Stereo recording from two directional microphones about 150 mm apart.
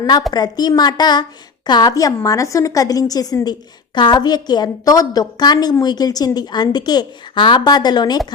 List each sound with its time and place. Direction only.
0.0 s a woman's voice: 25° left (ahead or behind)